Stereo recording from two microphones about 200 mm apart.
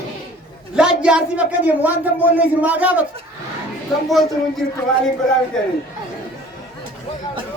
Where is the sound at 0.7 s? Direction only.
5° right (ahead or behind).